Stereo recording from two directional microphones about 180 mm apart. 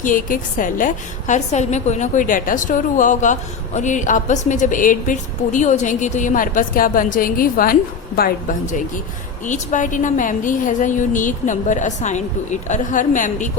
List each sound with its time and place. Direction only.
0.0 s a woman's voice: 50° left (ahead or behind)